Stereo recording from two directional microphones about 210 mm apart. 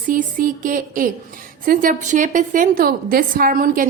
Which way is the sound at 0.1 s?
40° right (ahead or behind).